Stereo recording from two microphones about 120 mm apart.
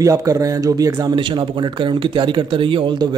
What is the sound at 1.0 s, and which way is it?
A man's voice, 40° right (ahead or behind).